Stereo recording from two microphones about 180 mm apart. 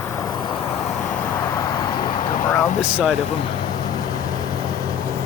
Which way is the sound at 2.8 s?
5° right (ahead or behind).